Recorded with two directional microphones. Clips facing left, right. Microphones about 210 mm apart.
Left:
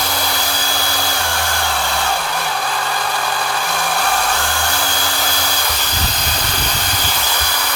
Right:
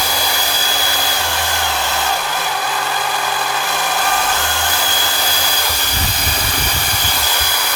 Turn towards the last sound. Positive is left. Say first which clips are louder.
# even
turn(degrees=-5)  # may be behind; listen again after turning